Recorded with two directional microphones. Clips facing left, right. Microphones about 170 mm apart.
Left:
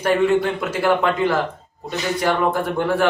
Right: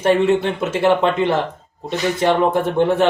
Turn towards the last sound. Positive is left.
turn(degrees=-25)  # may be behind; listen again after turning